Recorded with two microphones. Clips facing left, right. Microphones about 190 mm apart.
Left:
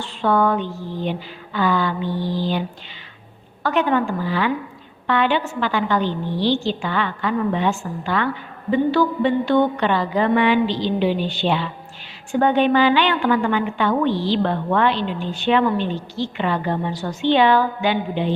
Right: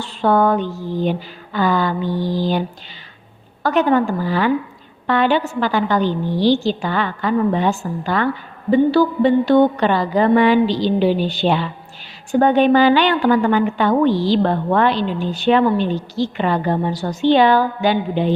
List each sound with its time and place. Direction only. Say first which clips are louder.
0.0 s a woman's voice: right 3 dB; 40° right (ahead or behind)